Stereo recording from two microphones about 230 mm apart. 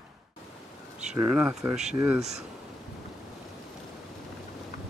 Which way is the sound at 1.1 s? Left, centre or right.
Centre.